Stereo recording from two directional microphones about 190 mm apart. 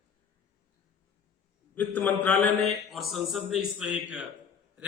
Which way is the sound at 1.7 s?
10° left (ahead or behind).